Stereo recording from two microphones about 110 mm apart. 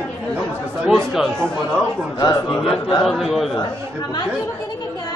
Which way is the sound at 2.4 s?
Centre (ahead or behind).